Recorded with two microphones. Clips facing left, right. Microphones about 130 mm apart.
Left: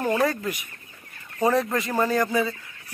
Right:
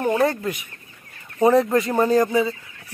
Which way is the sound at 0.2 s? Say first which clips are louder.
Right 3 dB; 25° right (ahead or behind).